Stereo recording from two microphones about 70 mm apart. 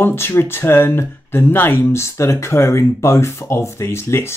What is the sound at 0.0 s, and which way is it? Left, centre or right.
Speech, left.